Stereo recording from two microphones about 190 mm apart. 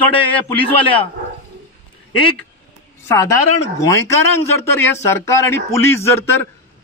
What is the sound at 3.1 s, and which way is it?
Speech, 15° left (ahead or behind).